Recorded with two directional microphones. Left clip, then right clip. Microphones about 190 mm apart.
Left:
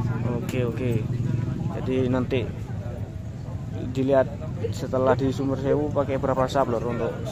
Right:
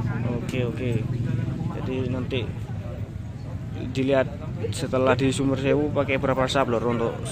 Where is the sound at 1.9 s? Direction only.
20° left (ahead or behind).